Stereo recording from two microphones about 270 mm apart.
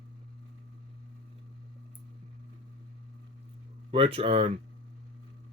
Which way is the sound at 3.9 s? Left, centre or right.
Right.